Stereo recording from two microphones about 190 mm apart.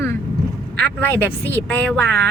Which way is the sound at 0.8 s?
10° left (ahead or behind).